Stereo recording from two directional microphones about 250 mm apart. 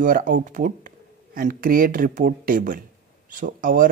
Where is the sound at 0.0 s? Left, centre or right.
Right.